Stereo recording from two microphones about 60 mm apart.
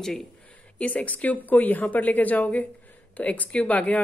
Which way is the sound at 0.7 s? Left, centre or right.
Left.